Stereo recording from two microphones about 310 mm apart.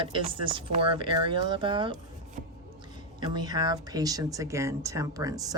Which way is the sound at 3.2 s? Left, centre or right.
Centre.